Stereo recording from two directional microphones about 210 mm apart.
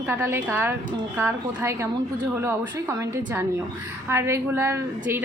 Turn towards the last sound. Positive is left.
turn(degrees=-10)  # may be behind; listen again after turning